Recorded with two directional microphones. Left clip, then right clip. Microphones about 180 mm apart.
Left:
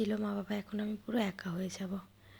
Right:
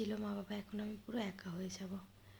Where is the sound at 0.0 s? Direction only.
30° left (ahead or behind).